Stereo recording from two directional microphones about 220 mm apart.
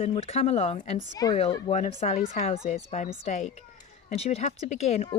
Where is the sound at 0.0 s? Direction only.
25° left (ahead or behind).